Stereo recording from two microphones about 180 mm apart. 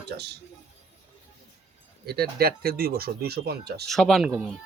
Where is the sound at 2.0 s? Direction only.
60° right (ahead or behind).